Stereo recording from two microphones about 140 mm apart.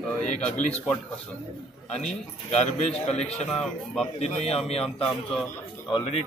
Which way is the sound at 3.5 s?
5° left (ahead or behind).